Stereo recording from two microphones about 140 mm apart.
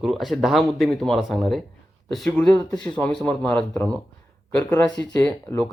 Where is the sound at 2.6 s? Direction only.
30° left (ahead or behind).